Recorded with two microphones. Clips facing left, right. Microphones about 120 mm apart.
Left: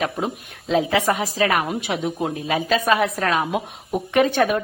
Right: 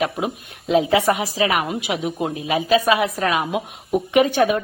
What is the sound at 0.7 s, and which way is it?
Speech, 15° right (ahead or behind).